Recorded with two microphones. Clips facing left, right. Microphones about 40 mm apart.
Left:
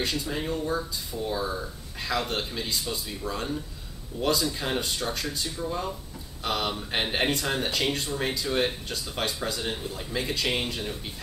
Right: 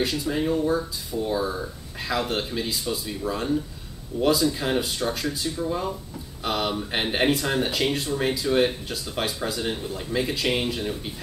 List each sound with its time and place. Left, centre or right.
0.0 s speech: centre